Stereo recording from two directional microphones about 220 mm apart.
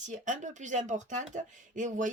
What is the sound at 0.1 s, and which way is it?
Speech, 35° right (ahead or behind).